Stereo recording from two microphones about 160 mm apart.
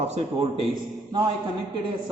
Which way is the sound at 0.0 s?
45° right (ahead or behind).